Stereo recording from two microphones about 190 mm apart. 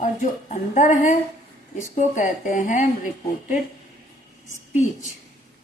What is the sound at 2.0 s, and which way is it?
Speech, 45° left (ahead or behind).